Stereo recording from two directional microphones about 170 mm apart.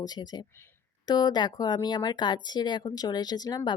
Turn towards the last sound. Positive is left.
turn(degrees=25)  # may be behind; listen again after turning